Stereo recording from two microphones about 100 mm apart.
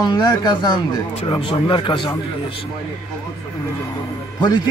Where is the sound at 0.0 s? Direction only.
45° left (ahead or behind).